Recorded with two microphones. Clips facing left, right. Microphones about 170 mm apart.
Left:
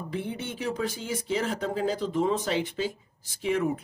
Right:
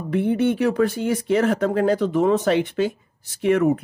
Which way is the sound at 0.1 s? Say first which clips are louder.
Right 16 dB; 60° right (ahead or behind).